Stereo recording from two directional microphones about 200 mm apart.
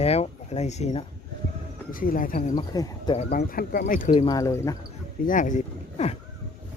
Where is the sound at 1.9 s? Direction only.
45° left (ahead or behind).